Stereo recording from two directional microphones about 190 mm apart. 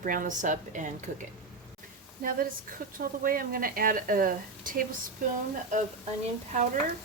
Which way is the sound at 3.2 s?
50° right (ahead or behind).